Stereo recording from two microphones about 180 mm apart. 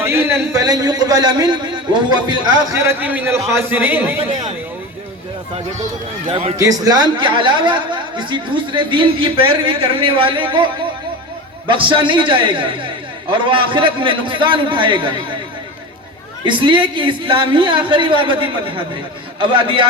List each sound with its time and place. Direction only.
0.0 s a man's voice: 15° right (ahead or behind)
5.5 s speech: 35° right (ahead or behind)
6.6 s speech: 20° right (ahead or behind)
11.7 s speech: 25° right (ahead or behind)
16.5 s speech: 25° right (ahead or behind)